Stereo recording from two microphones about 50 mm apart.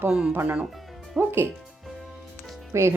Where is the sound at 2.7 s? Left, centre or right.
Right.